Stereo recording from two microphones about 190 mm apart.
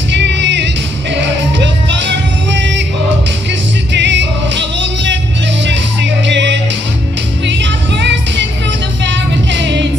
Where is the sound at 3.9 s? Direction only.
70° right (ahead or behind).